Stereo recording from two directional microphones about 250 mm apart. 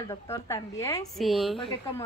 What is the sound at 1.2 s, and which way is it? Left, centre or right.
Speech, centre.